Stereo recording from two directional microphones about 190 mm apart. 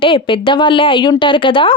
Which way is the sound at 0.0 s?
25° left (ahead or behind).